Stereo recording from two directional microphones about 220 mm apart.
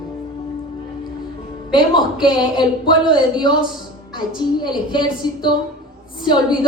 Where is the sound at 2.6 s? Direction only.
20° left (ahead or behind).